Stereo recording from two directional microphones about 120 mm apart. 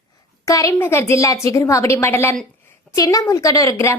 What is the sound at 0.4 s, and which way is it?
A woman's voice, 25° left (ahead or behind).